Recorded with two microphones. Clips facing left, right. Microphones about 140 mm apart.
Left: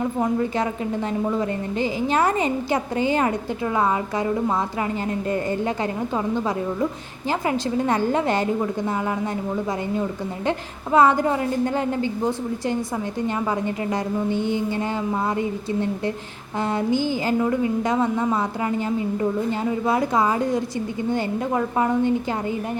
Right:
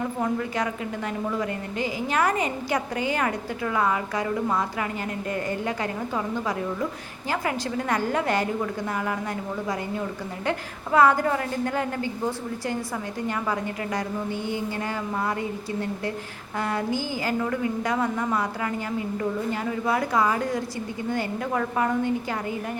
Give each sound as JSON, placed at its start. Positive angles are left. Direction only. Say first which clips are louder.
{"t": 0.0, "sound": "a woman's voice", "louder": "left 4 dB", "side_deg": 25}
{"t": 7.3, "sound": "a woman's voice", "louder": "left 4 dB", "side_deg": 25}
{"t": 10.9, "sound": "a woman's voice", "louder": "left 2 dB", "side_deg": 20}